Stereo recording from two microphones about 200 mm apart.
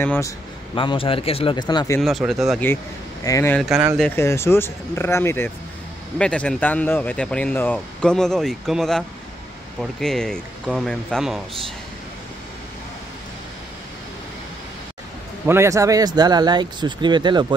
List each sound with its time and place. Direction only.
0.0 s speech: 10° left (ahead or behind)
0.7 s speech: 25° left (ahead or behind)
2.0 s speech: centre (ahead or behind)
3.3 s speech: 15° left (ahead or behind)
3.5 s speech: centre (ahead or behind)
4.1 s speech: 15° left (ahead or behind)
15.4 s speech: 10° right (ahead or behind)